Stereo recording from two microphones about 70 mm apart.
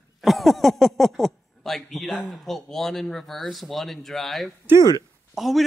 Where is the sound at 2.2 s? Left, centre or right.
Centre.